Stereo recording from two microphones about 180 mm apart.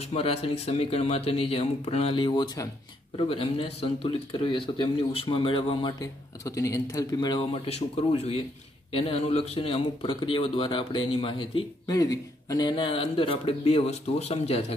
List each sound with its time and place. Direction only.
0.1 s a man's voice: 35° left (ahead or behind)